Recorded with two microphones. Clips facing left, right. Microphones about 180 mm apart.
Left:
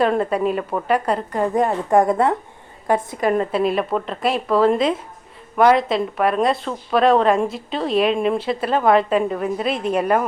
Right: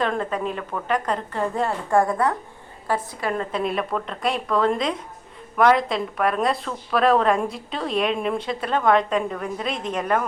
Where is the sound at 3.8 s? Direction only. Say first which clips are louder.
Left 4 dB; 25° left (ahead or behind).